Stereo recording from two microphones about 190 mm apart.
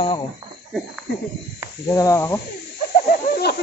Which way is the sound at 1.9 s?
20° left (ahead or behind).